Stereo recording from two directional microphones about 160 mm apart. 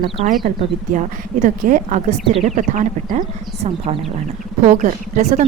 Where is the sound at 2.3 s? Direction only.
40° right (ahead or behind).